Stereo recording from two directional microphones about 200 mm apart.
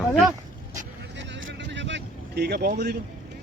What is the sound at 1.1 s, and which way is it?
Vehicle, 60° right (ahead or behind).